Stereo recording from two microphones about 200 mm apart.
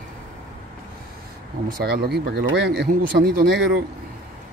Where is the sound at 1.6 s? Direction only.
50° right (ahead or behind).